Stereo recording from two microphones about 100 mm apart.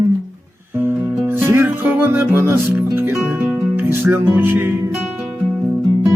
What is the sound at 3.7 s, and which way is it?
Music, 20° right (ahead or behind).